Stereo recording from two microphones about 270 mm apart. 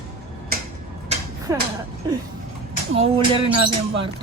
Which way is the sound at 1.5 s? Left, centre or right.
Centre.